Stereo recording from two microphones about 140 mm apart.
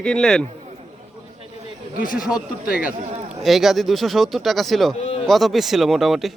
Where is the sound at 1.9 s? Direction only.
75° left (ahead or behind).